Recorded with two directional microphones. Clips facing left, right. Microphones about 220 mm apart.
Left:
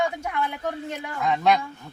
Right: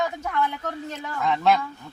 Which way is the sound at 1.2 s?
5° left (ahead or behind).